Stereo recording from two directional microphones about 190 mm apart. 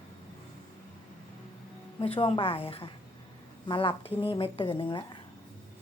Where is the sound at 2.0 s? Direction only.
30° left (ahead or behind).